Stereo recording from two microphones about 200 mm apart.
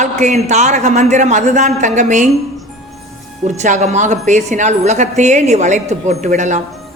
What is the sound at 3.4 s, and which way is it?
A woman's voice, 35° right (ahead or behind).